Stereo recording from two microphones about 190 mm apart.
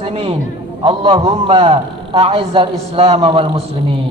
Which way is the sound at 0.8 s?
30° right (ahead or behind).